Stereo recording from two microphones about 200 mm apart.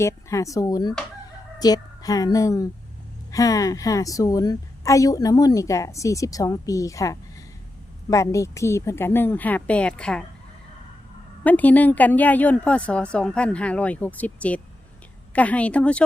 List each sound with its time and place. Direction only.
0.0 s a woman's voice: 15° left (ahead or behind)
11.4 s a woman's voice: 10° left (ahead or behind)